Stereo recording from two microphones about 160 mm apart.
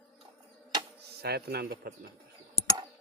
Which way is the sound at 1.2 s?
85° right.